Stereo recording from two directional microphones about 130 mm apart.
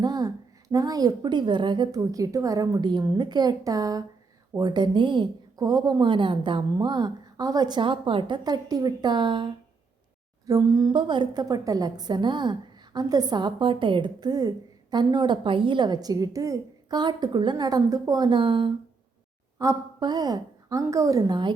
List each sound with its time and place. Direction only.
0.0 s a woman's voice: 30° right (ahead or behind)
10.4 s a woman's voice: 25° right (ahead or behind)
10.9 s a woman's voice: 35° right (ahead or behind)
19.5 s a woman's voice: 30° right (ahead or behind)